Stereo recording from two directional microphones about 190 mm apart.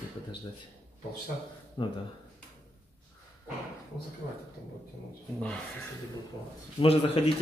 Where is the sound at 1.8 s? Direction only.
25° left (ahead or behind).